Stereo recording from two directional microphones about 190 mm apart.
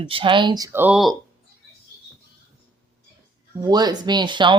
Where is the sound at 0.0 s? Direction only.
25° right (ahead or behind); by 1.1 s 5° right (ahead or behind).